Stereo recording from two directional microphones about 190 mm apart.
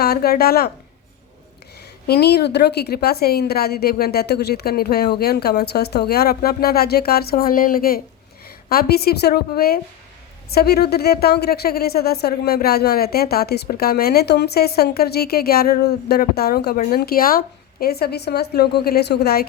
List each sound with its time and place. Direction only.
0.0 s a woman's voice: 55° left (ahead or behind)
2.0 s a woman's voice: 60° left (ahead or behind)